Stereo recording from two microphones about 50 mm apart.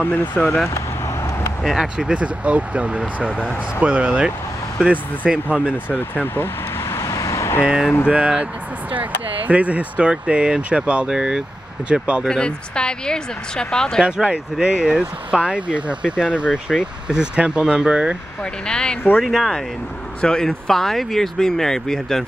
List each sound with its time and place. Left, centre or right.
0.0 s speech: left
0.7 s vehicle: left
1.6 s speech: centre
2.0 s speech: centre
2.2 s speech: right
5.9 s speech: left
6.8 s vehicle: left
8.1 s speech: right
9.5 s speech: right
12.3 s speech: centre
14.0 s speech: right
18.4 s speech: centre
19.1 s speech: centre
20.2 s speech: centre